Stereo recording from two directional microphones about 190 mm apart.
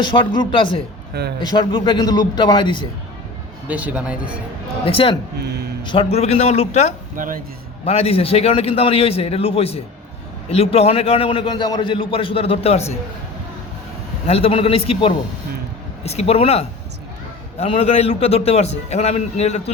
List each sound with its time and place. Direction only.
0.0 s a man's voice: 25° left (ahead or behind)
3.7 s a man's voice: 5° right (ahead or behind)
4.9 s a man's voice: 30° left (ahead or behind)
5.4 s speech: 60° right (ahead or behind)
5.8 s a man's voice: 25° left (ahead or behind)
7.2 s speech: 45° right (ahead or behind)
7.9 s a man's voice: 30° left (ahead or behind)
14.3 s a man's voice: 30° left (ahead or behind)